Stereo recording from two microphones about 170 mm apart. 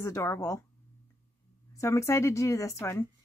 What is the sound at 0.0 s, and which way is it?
Speech, 15° left (ahead or behind).